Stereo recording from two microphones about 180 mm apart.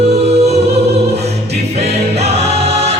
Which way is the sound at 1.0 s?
35° right (ahead or behind).